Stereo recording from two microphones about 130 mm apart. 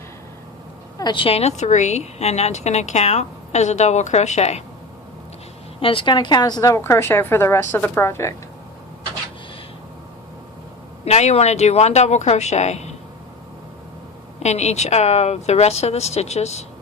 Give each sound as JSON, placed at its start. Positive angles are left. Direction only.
{"t": 0.9, "sound": "a woman's voice", "side_deg": 35}
{"t": 5.8, "sound": "a woman's voice", "side_deg": 45}
{"t": 11.0, "sound": "a woman's voice", "side_deg": 60}
{"t": 14.3, "sound": "a woman's voice", "side_deg": 60}